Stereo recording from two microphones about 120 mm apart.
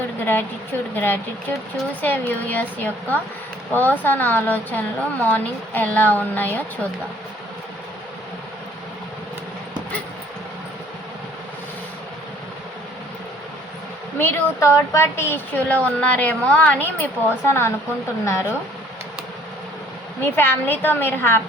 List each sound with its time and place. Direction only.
0.9 s a woman's voice: 15° left (ahead or behind)
14.2 s a woman's voice: 20° left (ahead or behind)
20.2 s a woman's voice: 20° left (ahead or behind)